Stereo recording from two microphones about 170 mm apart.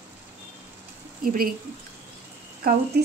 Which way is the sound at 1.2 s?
60° right (ahead or behind).